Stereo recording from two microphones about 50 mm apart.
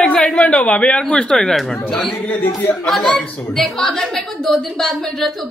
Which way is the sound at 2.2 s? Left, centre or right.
Left.